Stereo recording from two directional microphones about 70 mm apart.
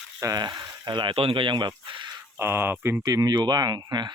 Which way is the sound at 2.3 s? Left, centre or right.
Right.